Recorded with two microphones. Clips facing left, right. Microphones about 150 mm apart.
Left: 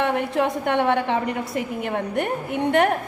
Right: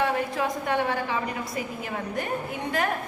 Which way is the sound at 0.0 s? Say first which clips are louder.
Left 4 dB; 65° left (ahead or behind).